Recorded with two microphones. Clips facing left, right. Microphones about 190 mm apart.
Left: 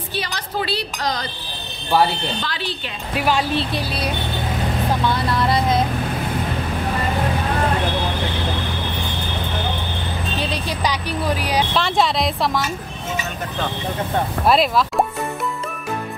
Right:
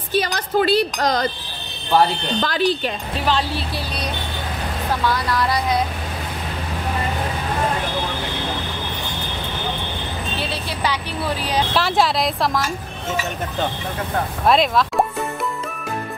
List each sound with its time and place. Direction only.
0.1 s speech: 45° right (ahead or behind)
2.4 s speech: 45° right (ahead or behind)
3.2 s speech: 10° left (ahead or behind)
5.1 s speech: 25° left (ahead or behind)
10.5 s speech: 15° left (ahead or behind)
11.7 s speech: 5° right (ahead or behind)
14.4 s speech: centre (ahead or behind)